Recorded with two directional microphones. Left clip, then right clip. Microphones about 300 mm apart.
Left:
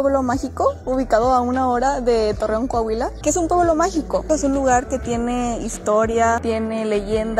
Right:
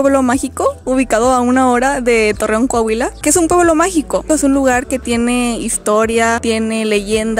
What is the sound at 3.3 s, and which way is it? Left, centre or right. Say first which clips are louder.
Speech: right 7 dB; right.